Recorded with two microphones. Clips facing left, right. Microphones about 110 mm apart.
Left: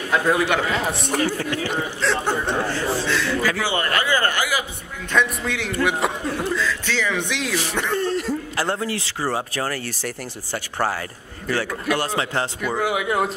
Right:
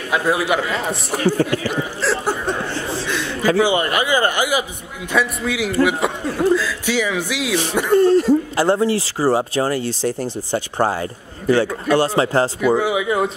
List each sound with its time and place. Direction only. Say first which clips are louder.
0.1 s a man's voice: right 1 dB; 10° right (ahead or behind)
1.7 s a sound: right 2 dB; 5° right (ahead or behind)
3.1 s a man's voice: right 2 dB; 20° right (ahead or behind)
5.1 s a man's voice: right 2 dB; 5° right (ahead or behind)
8.0 s speech: right 10 dB; 35° right (ahead or behind)
12.6 s a man's voice: right 5 dB; centre (ahead or behind)